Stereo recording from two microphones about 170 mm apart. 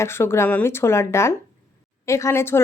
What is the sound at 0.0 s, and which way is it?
Speech, 15° left (ahead or behind).